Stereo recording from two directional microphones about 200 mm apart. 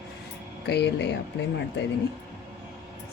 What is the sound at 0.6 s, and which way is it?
Speech, 60° left (ahead or behind).